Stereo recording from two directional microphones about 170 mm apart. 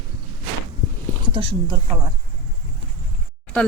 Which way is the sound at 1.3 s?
30° right (ahead or behind).